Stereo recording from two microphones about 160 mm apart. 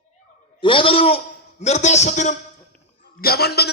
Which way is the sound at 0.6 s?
35° left (ahead or behind).